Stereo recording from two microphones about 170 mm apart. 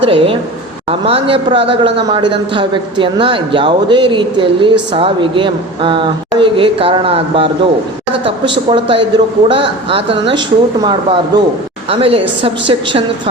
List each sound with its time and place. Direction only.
0.0 s a woman's voice: 30° right (ahead or behind)